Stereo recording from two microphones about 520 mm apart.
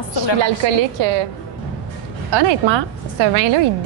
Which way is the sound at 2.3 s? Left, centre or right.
Right.